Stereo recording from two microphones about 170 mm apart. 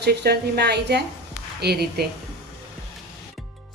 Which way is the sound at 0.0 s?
75° right (ahead or behind).